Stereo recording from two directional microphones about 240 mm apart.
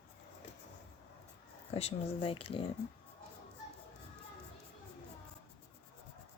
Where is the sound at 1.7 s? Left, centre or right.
Left.